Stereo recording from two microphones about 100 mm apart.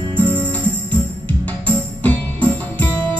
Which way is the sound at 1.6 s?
15° left (ahead or behind).